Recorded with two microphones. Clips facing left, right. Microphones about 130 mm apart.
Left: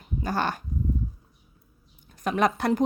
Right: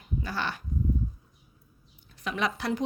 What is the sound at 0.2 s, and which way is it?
Dog, 45° left (ahead or behind).